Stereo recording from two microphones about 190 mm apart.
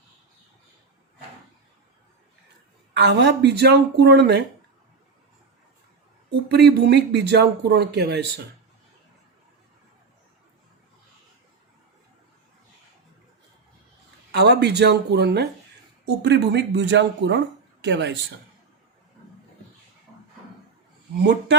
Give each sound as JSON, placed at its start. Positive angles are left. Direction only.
{"t": 2.9, "sound": "speech", "side_deg": -65}
{"t": 6.5, "sound": "speech", "side_deg": -60}
{"t": 14.3, "sound": "speech", "side_deg": -60}
{"t": 21.2, "sound": "speech", "side_deg": -65}